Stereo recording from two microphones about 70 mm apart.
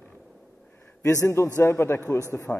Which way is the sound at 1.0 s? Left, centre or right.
Left.